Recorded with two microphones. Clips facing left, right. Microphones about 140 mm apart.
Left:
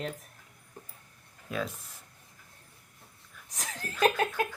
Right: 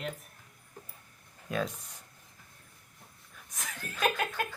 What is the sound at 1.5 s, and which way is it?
Speech, centre (ahead or behind).